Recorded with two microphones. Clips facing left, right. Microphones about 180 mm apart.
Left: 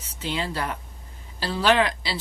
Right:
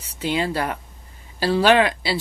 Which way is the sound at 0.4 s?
60° right (ahead or behind).